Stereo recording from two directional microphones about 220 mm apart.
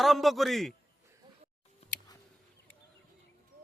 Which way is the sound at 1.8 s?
30° left (ahead or behind).